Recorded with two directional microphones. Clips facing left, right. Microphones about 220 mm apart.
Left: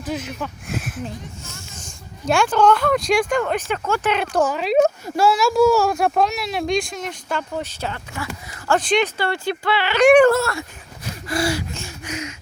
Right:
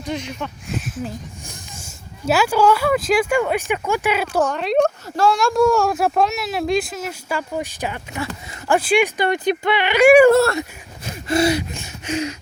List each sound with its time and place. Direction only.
0.0 s speech: 5° left (ahead or behind)
1.0 s speech: 10° right (ahead or behind)
10.3 s speech: 25° right (ahead or behind)
11.3 s gasp: 20° right (ahead or behind)